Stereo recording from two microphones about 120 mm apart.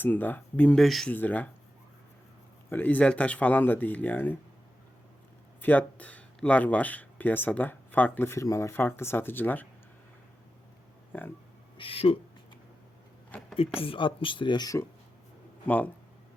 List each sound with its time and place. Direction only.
0.0 s speech: 15° left (ahead or behind)
1.1 s speech: 15° left (ahead or behind)
2.6 s speech: 15° left (ahead or behind)
5.6 s speech: 15° left (ahead or behind)
11.1 s speech: 15° left (ahead or behind)
11.8 s speech: 50° left (ahead or behind)
13.7 s speech: 50° left (ahead or behind)
15.6 s speech: 15° left (ahead or behind)